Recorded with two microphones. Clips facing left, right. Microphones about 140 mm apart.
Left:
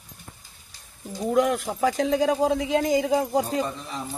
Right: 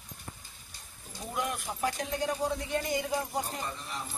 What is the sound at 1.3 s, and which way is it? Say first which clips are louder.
Speech: left 12 dB; 90° left.